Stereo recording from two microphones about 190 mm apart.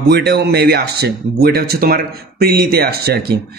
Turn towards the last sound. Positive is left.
turn(degrees=-55)  # may be behind; listen again after turning